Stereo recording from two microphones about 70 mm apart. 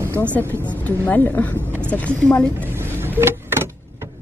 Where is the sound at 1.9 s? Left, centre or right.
Centre.